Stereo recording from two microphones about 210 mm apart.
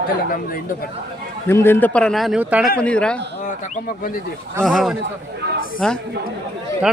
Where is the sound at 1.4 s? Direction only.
10° left (ahead or behind); by 2.6 s 5° right (ahead or behind).